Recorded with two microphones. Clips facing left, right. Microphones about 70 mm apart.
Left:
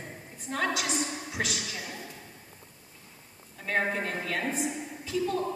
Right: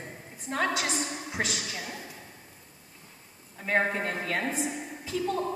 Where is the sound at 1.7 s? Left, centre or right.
Centre.